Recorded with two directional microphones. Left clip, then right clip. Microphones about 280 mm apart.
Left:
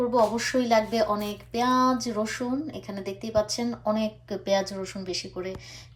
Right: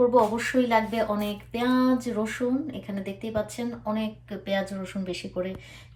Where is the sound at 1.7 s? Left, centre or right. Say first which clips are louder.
Left 2 dB; left.